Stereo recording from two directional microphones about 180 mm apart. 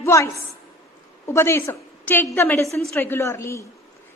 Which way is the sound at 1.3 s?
15° left (ahead or behind).